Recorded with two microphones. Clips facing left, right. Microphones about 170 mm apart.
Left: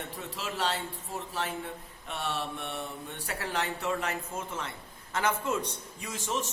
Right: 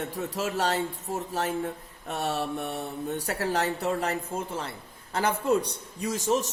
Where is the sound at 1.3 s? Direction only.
45° right (ahead or behind).